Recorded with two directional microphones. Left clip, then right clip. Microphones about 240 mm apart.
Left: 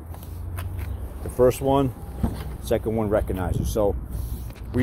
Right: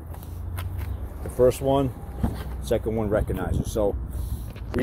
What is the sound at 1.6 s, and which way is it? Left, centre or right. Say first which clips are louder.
Speech: left 1 dB; centre.